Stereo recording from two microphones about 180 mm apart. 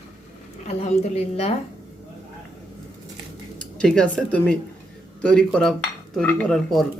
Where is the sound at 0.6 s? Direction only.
40° left (ahead or behind).